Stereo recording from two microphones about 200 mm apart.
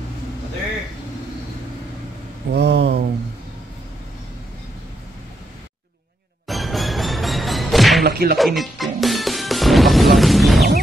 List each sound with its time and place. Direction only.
2.5 s a sound: 60° right (ahead or behind)
6.4 s music: centre (ahead or behind)
8.0 s music: 50° right (ahead or behind)
8.4 s music: centre (ahead or behind)